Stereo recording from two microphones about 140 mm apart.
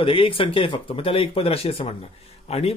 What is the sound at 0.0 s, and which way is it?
A man's voice, 40° left (ahead or behind).